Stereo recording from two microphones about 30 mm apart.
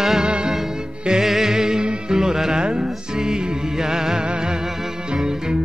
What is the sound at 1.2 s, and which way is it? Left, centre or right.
Music, centre.